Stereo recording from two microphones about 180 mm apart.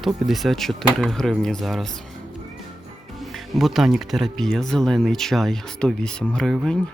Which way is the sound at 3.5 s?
Centre (ahead or behind).